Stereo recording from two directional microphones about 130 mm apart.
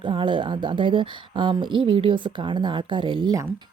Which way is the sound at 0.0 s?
40° right (ahead or behind).